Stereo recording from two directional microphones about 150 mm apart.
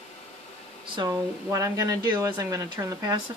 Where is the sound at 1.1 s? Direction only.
20° right (ahead or behind).